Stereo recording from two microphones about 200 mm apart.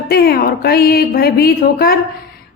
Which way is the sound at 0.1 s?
50° left (ahead or behind).